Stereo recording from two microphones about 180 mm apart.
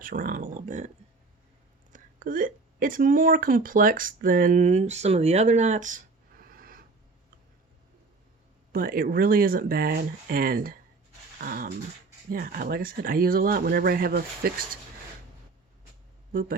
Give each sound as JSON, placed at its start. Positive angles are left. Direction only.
{"t": 0.0, "sound": "speech", "side_deg": -50}
{"t": 1.9, "sound": "speech", "side_deg": -50}
{"t": 8.7, "sound": "speech", "side_deg": -55}
{"t": 11.3, "sound": "dog", "side_deg": -55}
{"t": 12.3, "sound": "speech", "side_deg": -55}
{"t": 16.3, "sound": "speech", "side_deg": -55}